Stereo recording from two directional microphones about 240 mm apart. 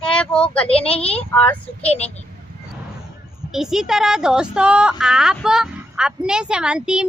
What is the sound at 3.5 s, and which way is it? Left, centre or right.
Speech, centre.